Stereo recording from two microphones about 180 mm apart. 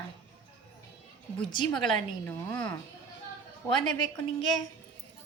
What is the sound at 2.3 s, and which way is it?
Speech, 10° left (ahead or behind).